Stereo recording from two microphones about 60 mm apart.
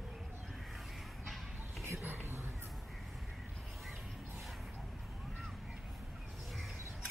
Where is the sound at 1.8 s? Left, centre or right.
Right.